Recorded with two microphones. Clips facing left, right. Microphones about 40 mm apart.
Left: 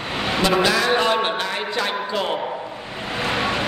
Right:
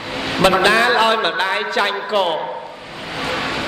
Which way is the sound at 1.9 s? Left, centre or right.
Right.